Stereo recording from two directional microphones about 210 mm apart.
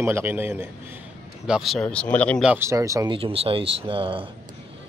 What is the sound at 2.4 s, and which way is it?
A man's voice, 10° right (ahead or behind).